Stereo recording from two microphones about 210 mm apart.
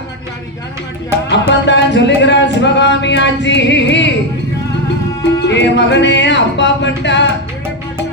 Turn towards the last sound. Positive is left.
turn(degrees=55)  # may be behind; listen again after turning